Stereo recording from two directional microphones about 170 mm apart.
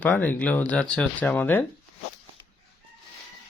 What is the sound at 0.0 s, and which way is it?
Speech, 10° left (ahead or behind).